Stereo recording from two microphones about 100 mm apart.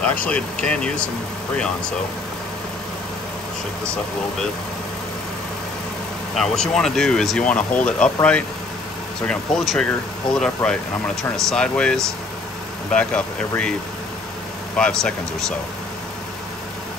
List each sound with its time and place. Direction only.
0.0 s speech: 15° left (ahead or behind)
6.3 s speech: 5° left (ahead or behind)
14.8 s speech: 5° left (ahead or behind)